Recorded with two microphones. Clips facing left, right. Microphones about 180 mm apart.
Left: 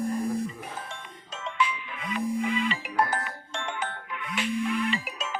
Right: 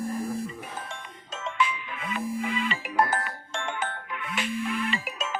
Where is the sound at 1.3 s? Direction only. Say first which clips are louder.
Right 1 dB; 45° right (ahead or behind).